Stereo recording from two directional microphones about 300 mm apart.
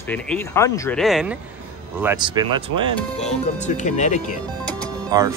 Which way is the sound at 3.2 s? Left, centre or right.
Left.